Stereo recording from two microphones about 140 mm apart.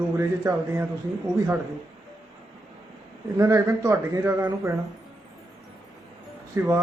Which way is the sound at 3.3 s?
20° right (ahead or behind).